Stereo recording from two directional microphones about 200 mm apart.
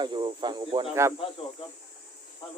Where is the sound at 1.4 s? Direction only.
25° left (ahead or behind).